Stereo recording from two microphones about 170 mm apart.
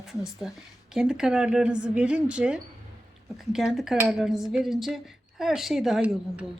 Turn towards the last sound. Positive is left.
turn(degrees=-5)  # may be behind; listen again after turning